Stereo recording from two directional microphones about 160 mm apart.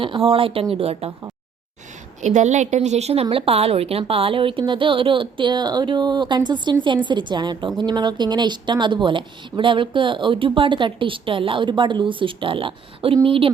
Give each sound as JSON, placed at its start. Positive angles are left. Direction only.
{"t": 0.0, "sound": "speech", "side_deg": -35}
{"t": 2.2, "sound": "a woman's voice", "side_deg": -50}